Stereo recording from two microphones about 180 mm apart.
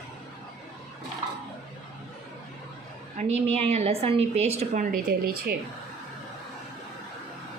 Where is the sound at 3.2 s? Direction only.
35° right (ahead or behind).